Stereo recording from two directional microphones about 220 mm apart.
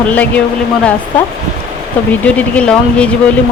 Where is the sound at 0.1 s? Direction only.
5° left (ahead or behind).